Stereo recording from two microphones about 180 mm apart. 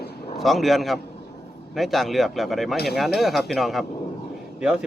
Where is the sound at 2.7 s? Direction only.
60° left (ahead or behind).